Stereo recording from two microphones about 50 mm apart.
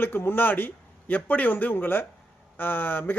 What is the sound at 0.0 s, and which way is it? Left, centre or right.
A man's voice, left.